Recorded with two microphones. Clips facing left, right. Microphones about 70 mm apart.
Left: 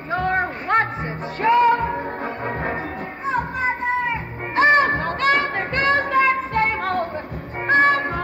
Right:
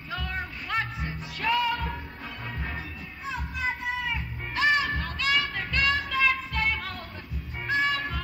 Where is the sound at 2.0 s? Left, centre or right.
Left.